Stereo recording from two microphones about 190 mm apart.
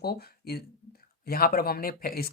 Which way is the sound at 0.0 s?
55° left (ahead or behind).